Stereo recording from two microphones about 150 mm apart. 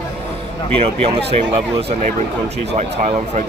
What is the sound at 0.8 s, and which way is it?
Speech, 40° right (ahead or behind).